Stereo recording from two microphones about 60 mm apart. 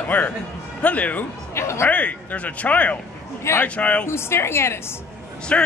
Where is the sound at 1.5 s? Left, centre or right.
Left.